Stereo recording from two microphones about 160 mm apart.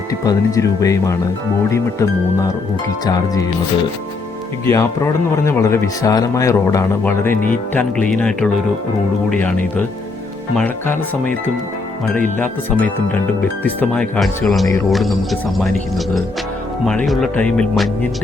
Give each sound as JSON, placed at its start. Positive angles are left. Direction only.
{"t": 0.3, "sound": "speech", "side_deg": 20}
{"t": 4.6, "sound": "speech", "side_deg": 15}
{"t": 13.7, "sound": "speech", "side_deg": 10}